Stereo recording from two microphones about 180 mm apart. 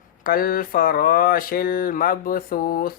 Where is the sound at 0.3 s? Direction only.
50° left (ahead or behind).